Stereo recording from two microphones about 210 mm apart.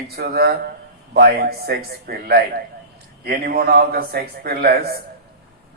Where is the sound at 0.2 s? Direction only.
50° right (ahead or behind).